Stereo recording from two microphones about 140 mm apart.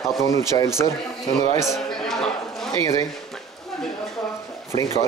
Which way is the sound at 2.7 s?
25° left (ahead or behind).